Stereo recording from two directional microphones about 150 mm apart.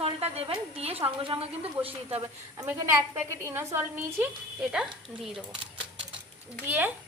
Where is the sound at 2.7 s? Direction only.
15° right (ahead or behind).